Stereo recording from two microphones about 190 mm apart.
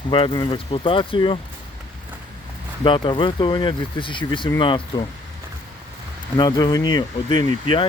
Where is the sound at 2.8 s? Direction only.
25° left (ahead or behind).